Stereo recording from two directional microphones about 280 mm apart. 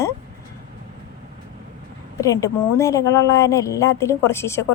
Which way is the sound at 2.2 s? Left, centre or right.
Centre.